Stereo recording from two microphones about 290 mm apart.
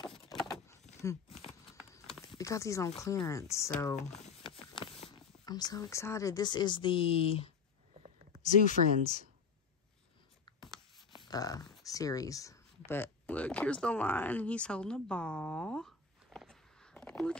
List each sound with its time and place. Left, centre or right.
0.3 s power windows: centre
1.0 s speech: centre
2.3 s speech: centre
4.2 s speech: centre
10.6 s writing: centre
11.1 s a sound: centre